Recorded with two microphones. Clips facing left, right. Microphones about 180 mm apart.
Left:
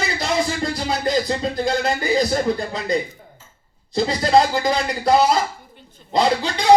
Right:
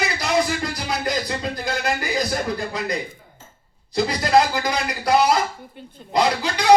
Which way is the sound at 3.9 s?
25° left (ahead or behind).